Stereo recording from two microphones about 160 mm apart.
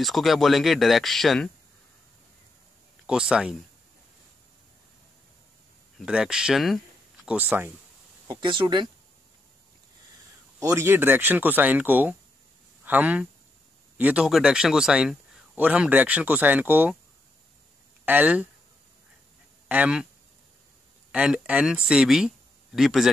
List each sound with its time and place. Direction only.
0.0 s speech: centre (ahead or behind)
3.1 s speech: 5° right (ahead or behind)
5.9 s speech: 5° right (ahead or behind)
7.3 s a man's voice: 10° right (ahead or behind)
8.3 s speech: 30° right (ahead or behind)
10.6 s a man's voice: 20° right (ahead or behind)
18.0 s a man's voice: 10° right (ahead or behind)
19.7 s a man's voice: 10° right (ahead or behind)
21.1 s speech: 5° right (ahead or behind)